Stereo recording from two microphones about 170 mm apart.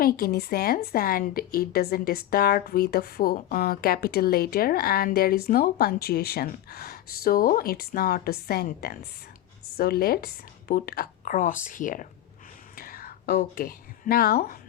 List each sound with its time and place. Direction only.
0.0 s a woman's voice: 65° left (ahead or behind)
12.7 s whispering: 60° left (ahead or behind)